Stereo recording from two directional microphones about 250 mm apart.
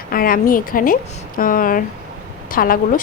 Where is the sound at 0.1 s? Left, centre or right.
Left.